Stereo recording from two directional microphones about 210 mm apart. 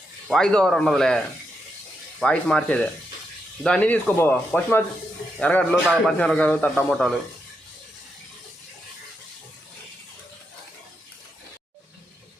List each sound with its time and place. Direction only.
0.3 s speech: 5° left (ahead or behind)
2.2 s a man's voice: 5° left (ahead or behind)